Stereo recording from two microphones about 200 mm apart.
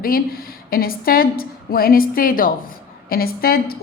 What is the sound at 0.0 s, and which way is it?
A woman's voice, 45° left (ahead or behind).